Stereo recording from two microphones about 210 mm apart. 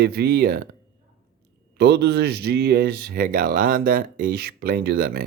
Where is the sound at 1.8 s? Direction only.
50° right (ahead or behind).